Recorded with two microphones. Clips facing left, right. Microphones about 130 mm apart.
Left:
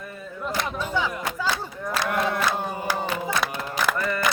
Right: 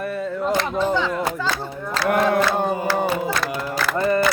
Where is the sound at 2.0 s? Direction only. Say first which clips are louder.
Right 9 dB; 60° right (ahead or behind).